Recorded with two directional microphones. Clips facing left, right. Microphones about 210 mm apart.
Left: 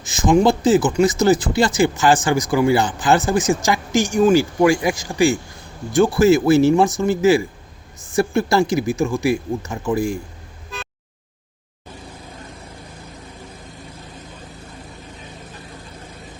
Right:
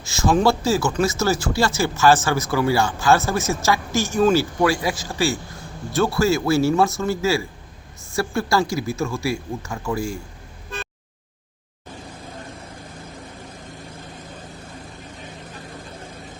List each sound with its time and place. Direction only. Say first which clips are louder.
0.0 s speech: left 3 dB; 15° left (ahead or behind)